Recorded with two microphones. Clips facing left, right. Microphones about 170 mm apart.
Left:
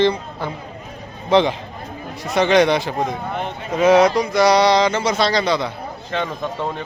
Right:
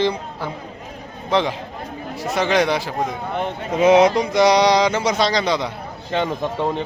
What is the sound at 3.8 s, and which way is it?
A man's voice, 20° right (ahead or behind).